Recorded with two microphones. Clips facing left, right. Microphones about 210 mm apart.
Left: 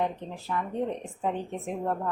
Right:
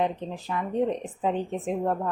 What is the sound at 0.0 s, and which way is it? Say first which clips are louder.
A woman's voice: right 3 dB; 15° right (ahead or behind).